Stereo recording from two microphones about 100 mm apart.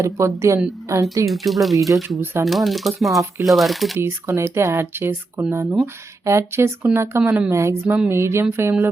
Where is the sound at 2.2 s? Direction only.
25° right (ahead or behind).